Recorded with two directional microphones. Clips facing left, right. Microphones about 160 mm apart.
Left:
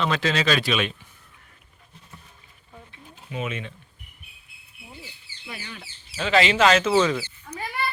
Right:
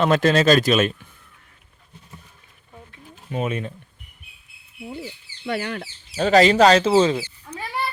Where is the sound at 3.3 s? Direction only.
40° right (ahead or behind).